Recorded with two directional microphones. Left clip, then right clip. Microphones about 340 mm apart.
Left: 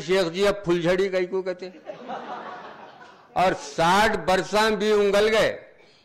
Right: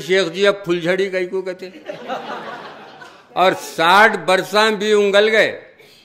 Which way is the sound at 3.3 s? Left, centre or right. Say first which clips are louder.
Right 6 dB; left.